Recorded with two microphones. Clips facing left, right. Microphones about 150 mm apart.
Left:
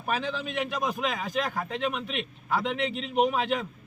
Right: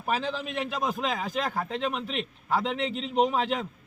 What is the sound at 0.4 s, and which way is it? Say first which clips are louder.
A man's voice: even; 30° right (ahead or behind).